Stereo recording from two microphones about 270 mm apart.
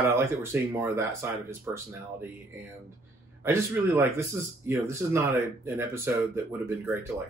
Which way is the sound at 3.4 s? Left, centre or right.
Centre.